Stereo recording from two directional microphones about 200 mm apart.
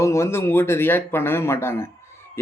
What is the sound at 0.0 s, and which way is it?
Speech, 15° left (ahead or behind).